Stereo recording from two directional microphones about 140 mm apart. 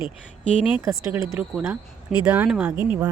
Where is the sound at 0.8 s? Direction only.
20° right (ahead or behind).